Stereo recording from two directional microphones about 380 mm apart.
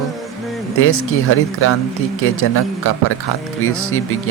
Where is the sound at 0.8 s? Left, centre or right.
Left.